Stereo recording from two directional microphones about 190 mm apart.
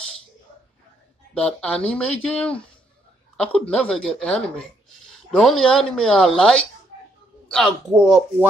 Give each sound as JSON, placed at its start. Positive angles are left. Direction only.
{"t": 1.3, "sound": "speech", "side_deg": 5}